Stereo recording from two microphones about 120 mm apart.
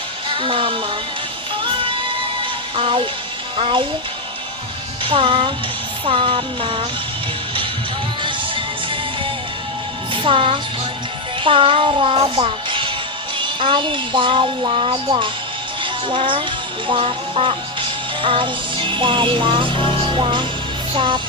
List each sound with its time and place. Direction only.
0.3 s a child's voice: 45° right (ahead or behind)
2.4 s music: 50° right (ahead or behind)
3.6 s a child's voice: 45° right (ahead or behind)
5.0 s a child's voice: 45° right (ahead or behind)
8.2 s music: 45° right (ahead or behind)
10.1 s a child's voice: 45° right (ahead or behind)
15.8 s music: 45° right (ahead or behind)
16.8 s speech: 45° right (ahead or behind)
20.9 s a child's voice: 45° right (ahead or behind)